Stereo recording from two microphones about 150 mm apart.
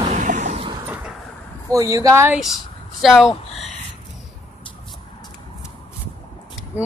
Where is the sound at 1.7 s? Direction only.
20° right (ahead or behind).